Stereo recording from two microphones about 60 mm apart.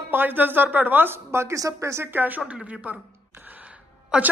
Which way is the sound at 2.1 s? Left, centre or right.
Right.